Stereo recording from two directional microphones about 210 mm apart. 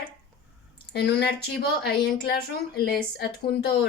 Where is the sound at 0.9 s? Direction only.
50° left (ahead or behind).